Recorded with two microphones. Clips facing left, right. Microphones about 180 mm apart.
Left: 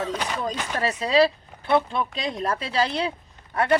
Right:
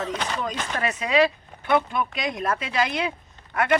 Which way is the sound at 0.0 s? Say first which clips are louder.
Left 1 dB; 10° left (ahead or behind).